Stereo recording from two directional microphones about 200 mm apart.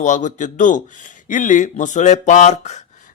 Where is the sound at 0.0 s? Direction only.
35° left (ahead or behind).